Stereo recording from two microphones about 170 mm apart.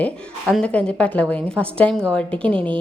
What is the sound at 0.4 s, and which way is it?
A woman's voice, 5° left (ahead or behind).